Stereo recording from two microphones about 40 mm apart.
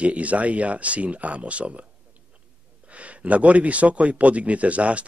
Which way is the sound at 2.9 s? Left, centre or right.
Right.